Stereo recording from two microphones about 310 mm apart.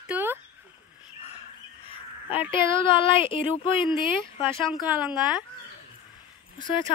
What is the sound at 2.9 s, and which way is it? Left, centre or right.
Speech, centre.